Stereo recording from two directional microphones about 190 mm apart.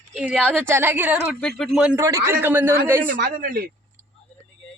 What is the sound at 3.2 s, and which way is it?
Speech, 50° right (ahead or behind).